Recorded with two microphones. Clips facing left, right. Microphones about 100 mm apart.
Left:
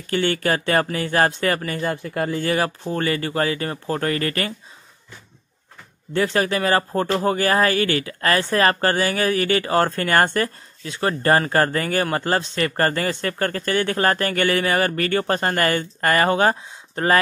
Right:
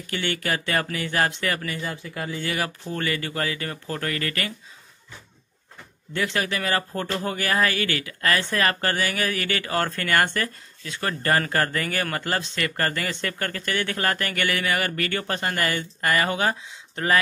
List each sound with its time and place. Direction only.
0.0 s speech: 40° left (ahead or behind)
6.1 s speech: 35° left (ahead or behind)